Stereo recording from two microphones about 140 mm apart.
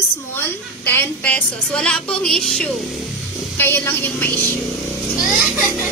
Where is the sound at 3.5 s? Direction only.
15° left (ahead or behind).